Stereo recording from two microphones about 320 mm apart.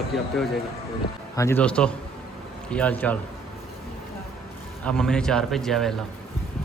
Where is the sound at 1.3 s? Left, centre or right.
Centre.